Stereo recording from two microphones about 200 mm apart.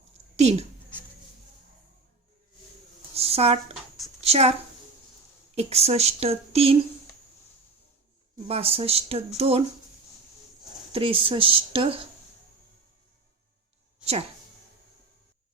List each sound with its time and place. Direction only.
0.3 s speech: 30° right (ahead or behind)
3.2 s a woman's voice: 30° right (ahead or behind)
5.5 s a woman's voice: 30° right (ahead or behind)
8.4 s speech: 30° right (ahead or behind)
10.9 s speech: 25° right (ahead or behind)
14.0 s a sound: 30° right (ahead or behind)